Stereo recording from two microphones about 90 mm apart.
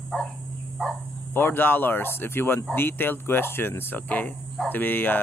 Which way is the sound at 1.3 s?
25° left (ahead or behind).